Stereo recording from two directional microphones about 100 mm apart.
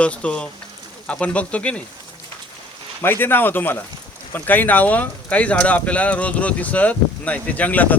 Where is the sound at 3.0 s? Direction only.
20° left (ahead or behind).